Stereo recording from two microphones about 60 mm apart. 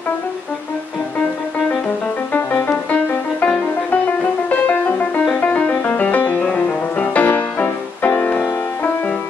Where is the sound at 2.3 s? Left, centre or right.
Left.